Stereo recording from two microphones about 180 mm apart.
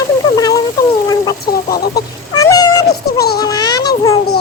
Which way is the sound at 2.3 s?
20° left (ahead or behind).